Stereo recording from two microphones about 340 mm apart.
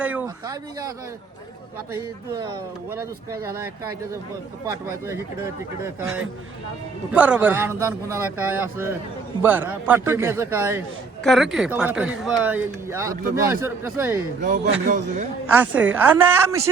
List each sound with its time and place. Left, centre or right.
0.0 s a man's voice: centre
2.9 s a man's voice: centre
14.4 s speech: right
15.5 s a man's voice: centre